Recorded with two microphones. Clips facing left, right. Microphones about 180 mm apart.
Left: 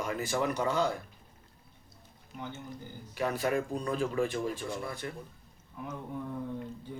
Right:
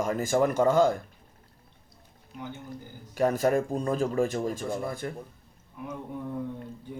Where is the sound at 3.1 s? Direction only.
45° right (ahead or behind).